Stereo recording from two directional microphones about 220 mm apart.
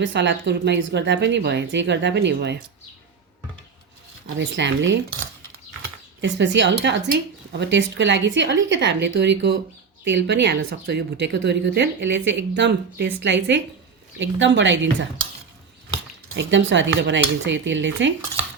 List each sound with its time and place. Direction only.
0.0 s speech: 55° right (ahead or behind)
4.4 s cutlery: 55° right (ahead or behind)
6.2 s speech: 55° right (ahead or behind)
14.2 s cutlery: 55° right (ahead or behind)
16.3 s cutlery: 55° right (ahead or behind)